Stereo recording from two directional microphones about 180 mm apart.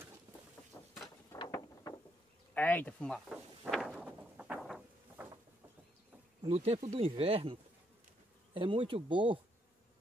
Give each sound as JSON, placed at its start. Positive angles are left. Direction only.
{"t": 1.3, "sound": "vehicle", "side_deg": 20}
{"t": 2.5, "sound": "a sound", "side_deg": 10}
{"t": 6.4, "sound": "speech", "side_deg": -35}
{"t": 8.5, "sound": "speech", "side_deg": -30}